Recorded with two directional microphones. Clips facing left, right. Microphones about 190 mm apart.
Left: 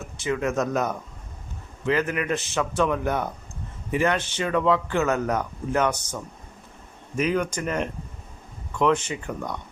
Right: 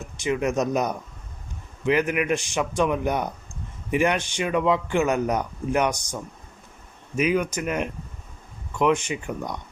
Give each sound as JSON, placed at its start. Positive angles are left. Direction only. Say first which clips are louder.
{"t": 0.2, "sound": "speech", "louder": "right 1 dB", "side_deg": -15}
{"t": 7.2, "sound": "speech", "louder": "right 1 dB", "side_deg": -10}